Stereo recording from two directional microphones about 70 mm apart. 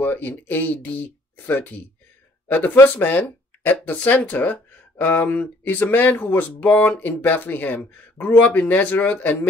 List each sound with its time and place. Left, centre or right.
0.0 s speech: left